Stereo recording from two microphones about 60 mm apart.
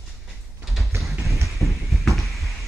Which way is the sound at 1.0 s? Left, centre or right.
Centre.